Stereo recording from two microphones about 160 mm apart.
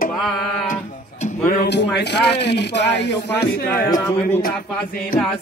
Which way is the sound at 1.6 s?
90° left.